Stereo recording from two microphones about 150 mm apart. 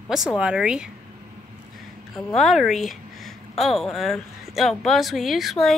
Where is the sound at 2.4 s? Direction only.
Centre (ahead or behind).